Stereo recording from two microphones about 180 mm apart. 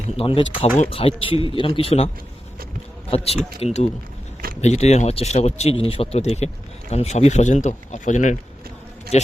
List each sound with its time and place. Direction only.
0.2 s speech: 30° left (ahead or behind)
3.1 s speech: 35° left (ahead or behind)